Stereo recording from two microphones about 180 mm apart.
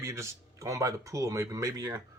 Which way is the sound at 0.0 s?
15° right (ahead or behind).